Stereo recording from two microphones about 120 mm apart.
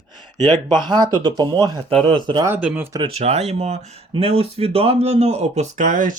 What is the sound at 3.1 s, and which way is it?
Speech, 60° right (ahead or behind).